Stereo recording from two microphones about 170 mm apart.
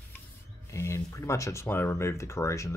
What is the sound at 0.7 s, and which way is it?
Speech, 15° left (ahead or behind).